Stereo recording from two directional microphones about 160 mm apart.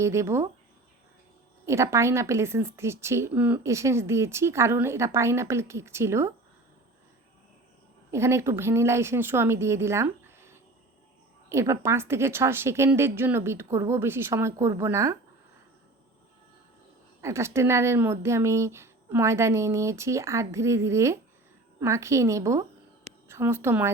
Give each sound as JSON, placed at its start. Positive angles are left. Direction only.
{"t": 0.0, "sound": "a woman's voice", "side_deg": -15}
{"t": 1.6, "sound": "a woman's voice", "side_deg": -15}
{"t": 8.1, "sound": "a woman's voice", "side_deg": -15}
{"t": 17.2, "sound": "a woman's voice", "side_deg": -15}